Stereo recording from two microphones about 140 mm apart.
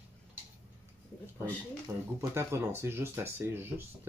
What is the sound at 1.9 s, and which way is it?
Speech, 10° right (ahead or behind).